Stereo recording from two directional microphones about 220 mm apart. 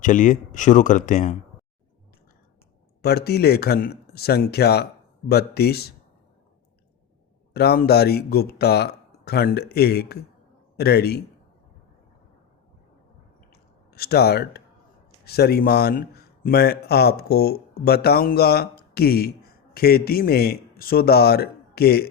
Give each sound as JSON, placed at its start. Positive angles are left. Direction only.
{"t": 0.0, "sound": "speech", "side_deg": 35}
{"t": 3.0, "sound": "speech", "side_deg": 45}
{"t": 7.5, "sound": "speech", "side_deg": 45}
{"t": 13.5, "sound": "clicking", "side_deg": 45}
{"t": 15.2, "sound": "a man's voice", "side_deg": 45}